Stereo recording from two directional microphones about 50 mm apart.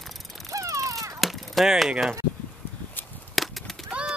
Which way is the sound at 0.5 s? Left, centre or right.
Right.